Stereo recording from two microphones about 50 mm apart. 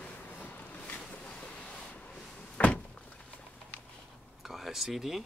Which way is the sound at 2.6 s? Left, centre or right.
Left.